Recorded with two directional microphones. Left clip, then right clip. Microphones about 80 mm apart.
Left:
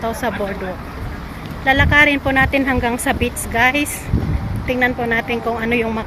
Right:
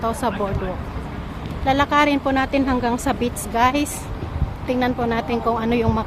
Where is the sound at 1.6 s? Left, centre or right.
Centre.